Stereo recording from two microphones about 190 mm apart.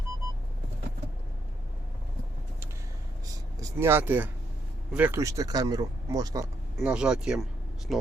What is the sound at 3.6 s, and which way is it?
Speech, 15° right (ahead or behind).